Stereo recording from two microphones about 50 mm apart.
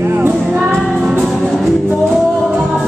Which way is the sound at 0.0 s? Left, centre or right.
Right.